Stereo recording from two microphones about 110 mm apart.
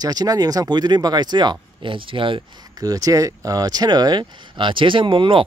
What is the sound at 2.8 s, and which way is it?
Speech, 35° right (ahead or behind).